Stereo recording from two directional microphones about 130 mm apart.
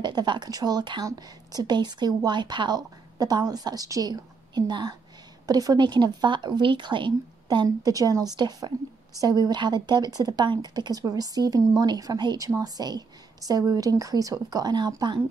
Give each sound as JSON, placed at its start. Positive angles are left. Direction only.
{"t": 0.0, "sound": "speech", "side_deg": -35}